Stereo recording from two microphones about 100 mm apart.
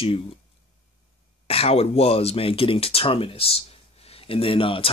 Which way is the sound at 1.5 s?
80° left.